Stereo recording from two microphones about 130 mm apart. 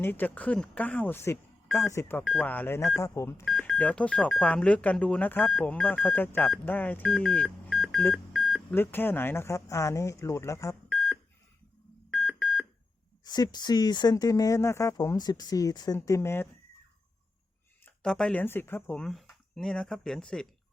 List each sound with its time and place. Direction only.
0.0 s speech: 15° left (ahead or behind)
3.4 s speech: 5° left (ahead or behind)
7.7 s music: centre (ahead or behind)
8.1 s beep: centre (ahead or behind)
8.7 s speech: 15° left (ahead or behind)
10.8 s beep: centre (ahead or behind)
13.2 s speech: 30° left (ahead or behind)
17.8 s speech: 5° left (ahead or behind)
18.9 s speech: centre (ahead or behind)